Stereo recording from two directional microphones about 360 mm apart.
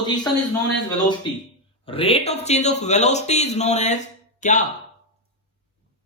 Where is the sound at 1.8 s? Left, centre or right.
Centre.